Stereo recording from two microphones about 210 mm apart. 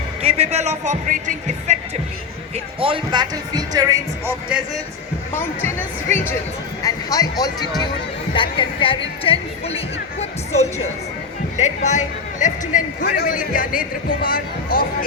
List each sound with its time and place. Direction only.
0.2 s speech: 30° right (ahead or behind)
2.8 s speech: 25° right (ahead or behind)
5.3 s a man's voice: 10° left (ahead or behind); by 14.8 s 45° left (ahead or behind)